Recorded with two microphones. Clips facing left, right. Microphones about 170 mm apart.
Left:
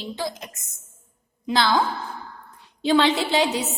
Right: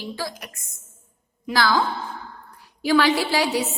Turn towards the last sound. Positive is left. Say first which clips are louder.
# even
turn(degrees=20)  # may be behind; listen again after turning